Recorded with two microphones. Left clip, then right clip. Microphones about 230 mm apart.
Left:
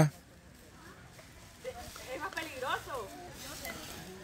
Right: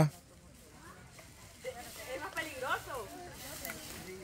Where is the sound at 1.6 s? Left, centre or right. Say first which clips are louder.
Even; centre.